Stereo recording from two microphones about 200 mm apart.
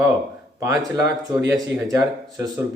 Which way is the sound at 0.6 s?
15° right (ahead or behind).